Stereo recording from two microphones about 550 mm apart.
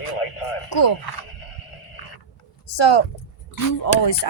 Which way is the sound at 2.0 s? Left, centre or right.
Left.